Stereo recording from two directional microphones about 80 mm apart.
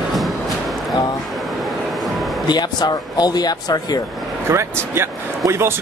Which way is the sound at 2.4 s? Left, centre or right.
Left.